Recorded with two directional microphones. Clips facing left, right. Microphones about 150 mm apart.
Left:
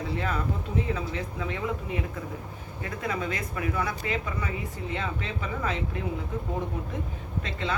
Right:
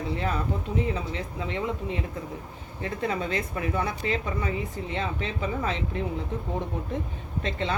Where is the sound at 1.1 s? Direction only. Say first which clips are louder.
Right 1 dB; 25° right (ahead or behind).